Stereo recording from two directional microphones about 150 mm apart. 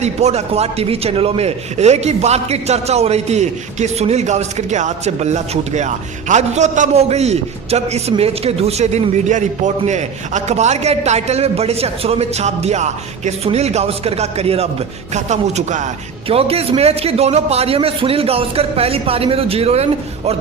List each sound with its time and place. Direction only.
0.0 s speech: 45° right (ahead or behind)
16.3 s a man's voice: 40° right (ahead or behind)